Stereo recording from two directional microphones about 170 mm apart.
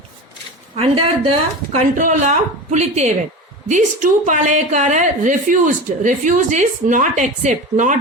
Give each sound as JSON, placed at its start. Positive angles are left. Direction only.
{"t": 0.8, "sound": "a woman's voice", "side_deg": -35}